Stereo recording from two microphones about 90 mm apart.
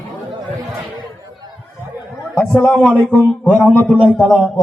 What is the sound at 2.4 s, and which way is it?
Speech, 20° left (ahead or behind).